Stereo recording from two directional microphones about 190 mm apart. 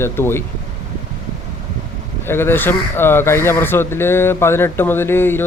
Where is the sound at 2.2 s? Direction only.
10° left (ahead or behind).